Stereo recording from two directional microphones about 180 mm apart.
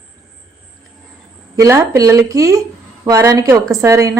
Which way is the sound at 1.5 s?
15° right (ahead or behind).